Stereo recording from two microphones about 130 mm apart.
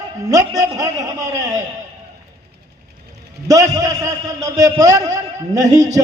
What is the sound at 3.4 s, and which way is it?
A man's voice, 25° right (ahead or behind).